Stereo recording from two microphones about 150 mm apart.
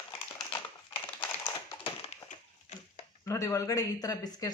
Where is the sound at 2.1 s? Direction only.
45° left (ahead or behind).